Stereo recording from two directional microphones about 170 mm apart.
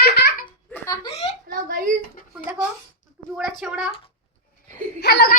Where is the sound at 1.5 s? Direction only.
55° right (ahead or behind).